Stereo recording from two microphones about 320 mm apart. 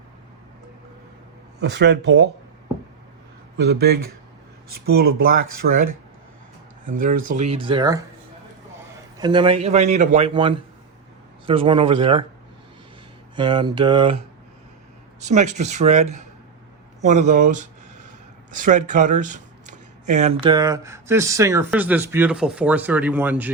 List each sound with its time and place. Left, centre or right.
1.5 s speech: right
3.6 s speech: right
6.9 s speech: right
7.3 s speech: centre
9.1 s speech: centre
13.3 s speech: centre
15.2 s speech: right; by 23.5 s centre